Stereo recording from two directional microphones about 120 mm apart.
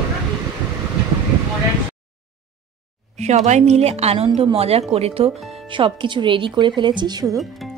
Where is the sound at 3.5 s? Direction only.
70° right (ahead or behind); by 7.4 s 35° right (ahead or behind).